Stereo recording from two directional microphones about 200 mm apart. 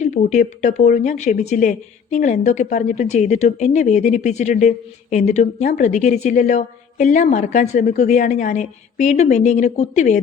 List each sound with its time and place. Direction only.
0.0 s a woman's voice: 35° left (ahead or behind)